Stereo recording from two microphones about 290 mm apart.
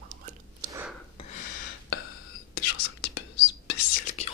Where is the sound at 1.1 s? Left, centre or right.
Left.